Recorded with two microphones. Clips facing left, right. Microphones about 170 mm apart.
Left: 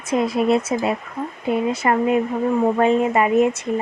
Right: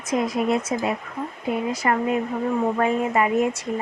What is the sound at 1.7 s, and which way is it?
A woman's voice, 25° left (ahead or behind).